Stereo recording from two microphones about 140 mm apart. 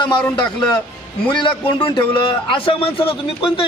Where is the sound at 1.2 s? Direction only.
35° left (ahead or behind).